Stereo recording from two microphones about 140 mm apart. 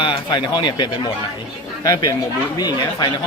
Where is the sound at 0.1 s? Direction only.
35° left (ahead or behind).